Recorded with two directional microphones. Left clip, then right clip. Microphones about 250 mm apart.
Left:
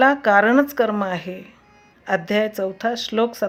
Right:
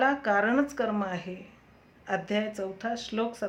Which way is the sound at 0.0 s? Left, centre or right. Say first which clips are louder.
Left 10 dB; left.